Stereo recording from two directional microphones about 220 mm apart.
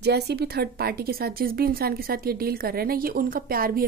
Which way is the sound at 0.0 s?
50° right (ahead or behind).